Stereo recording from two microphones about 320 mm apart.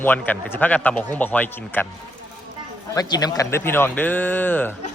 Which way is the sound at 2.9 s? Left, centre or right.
Centre.